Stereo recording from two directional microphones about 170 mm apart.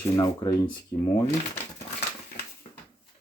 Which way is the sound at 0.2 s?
25° left (ahead or behind).